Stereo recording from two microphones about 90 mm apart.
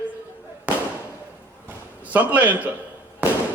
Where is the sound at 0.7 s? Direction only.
15° right (ahead or behind).